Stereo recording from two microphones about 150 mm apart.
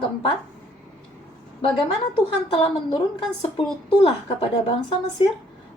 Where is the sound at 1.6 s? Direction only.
40° left (ahead or behind).